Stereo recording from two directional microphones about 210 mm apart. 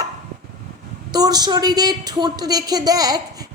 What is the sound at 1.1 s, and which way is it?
A woman's voice, 20° right (ahead or behind).